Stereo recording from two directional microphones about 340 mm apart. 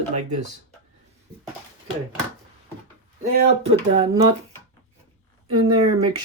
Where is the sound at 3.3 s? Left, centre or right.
Centre.